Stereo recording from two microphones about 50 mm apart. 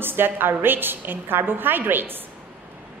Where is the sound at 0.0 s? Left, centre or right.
Right.